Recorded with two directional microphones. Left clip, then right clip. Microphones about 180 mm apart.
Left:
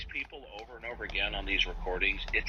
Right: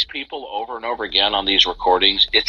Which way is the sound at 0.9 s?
10° left (ahead or behind).